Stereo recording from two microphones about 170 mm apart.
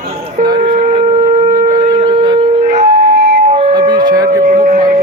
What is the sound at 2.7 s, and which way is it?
Wind instrument, 40° right (ahead or behind).